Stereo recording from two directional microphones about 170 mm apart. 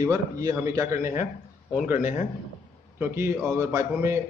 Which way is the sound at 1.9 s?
50° left (ahead or behind).